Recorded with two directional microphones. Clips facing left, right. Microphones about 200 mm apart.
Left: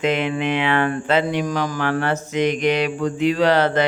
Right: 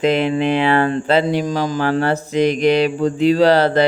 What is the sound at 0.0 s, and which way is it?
Mantra, 35° right (ahead or behind).